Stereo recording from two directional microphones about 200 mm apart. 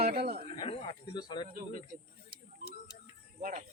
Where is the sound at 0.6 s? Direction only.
25° left (ahead or behind).